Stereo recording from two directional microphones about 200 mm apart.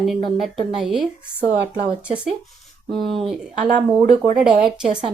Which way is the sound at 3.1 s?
Centre (ahead or behind).